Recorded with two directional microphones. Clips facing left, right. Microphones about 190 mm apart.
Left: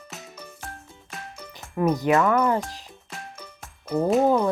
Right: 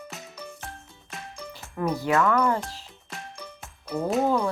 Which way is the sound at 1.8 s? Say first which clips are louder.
Left 4 dB; 20° left (ahead or behind).